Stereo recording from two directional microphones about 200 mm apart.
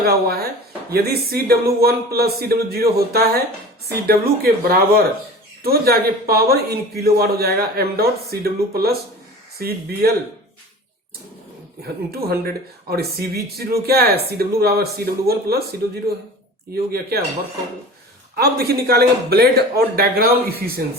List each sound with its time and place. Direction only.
0.0 s a man's voice: 50° right (ahead or behind)
11.8 s a man's voice: 50° right (ahead or behind)
18.3 s a man's voice: 50° right (ahead or behind)